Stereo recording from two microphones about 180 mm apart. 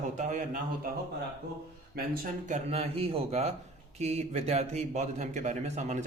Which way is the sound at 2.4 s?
40° right (ahead or behind).